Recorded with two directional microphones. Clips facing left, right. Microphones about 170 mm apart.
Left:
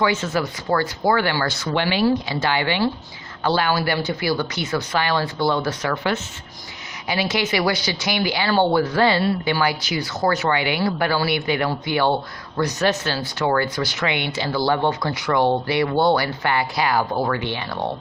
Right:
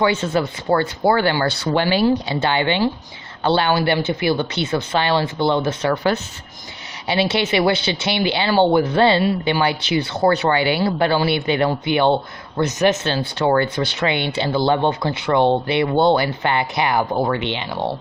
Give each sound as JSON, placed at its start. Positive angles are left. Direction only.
{"t": 0.0, "sound": "speech", "side_deg": -30}
{"t": 5.9, "sound": "speech", "side_deg": -35}